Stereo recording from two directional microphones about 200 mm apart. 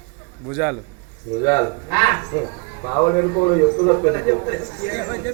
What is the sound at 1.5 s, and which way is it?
Speech, 15° left (ahead or behind).